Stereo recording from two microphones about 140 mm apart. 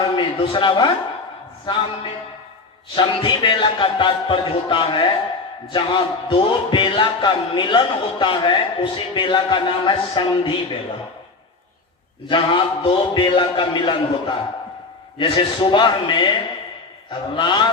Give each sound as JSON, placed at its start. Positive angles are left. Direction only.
{"t": 0.2, "sound": "speech", "side_deg": 35}
{"t": 2.9, "sound": "speech", "side_deg": 35}
{"t": 12.3, "sound": "speech", "side_deg": 35}